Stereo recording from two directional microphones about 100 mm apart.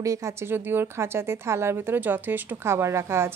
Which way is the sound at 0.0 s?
30° right (ahead or behind).